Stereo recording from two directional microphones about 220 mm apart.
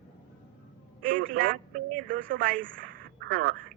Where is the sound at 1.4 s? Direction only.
40° right (ahead or behind).